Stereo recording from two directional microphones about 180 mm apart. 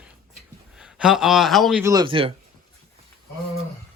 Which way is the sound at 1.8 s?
20° right (ahead or behind).